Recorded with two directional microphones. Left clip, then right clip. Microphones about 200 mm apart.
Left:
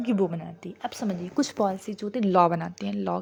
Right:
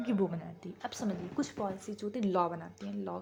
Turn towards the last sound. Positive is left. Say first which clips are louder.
# left 11 dB
turn(degrees=40)  # may be behind; listen again after turning